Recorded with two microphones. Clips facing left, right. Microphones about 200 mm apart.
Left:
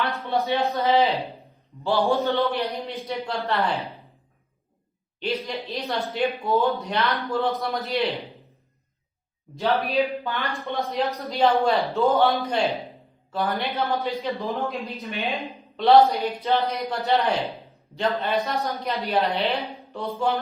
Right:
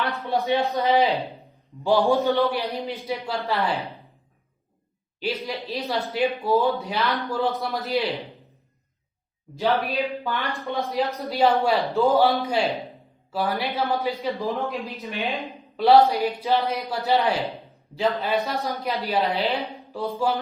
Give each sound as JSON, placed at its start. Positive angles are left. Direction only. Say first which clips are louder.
{"t": 0.2, "sound": "a man's voice", "louder": "right 2 dB", "side_deg": -15}
{"t": 2.6, "sound": "speech", "louder": "even", "side_deg": 0}
{"t": 5.7, "sound": "speech", "louder": "right 1 dB", "side_deg": -5}
{"t": 9.6, "sound": "a woman's voice", "louder": "left 1 dB", "side_deg": 0}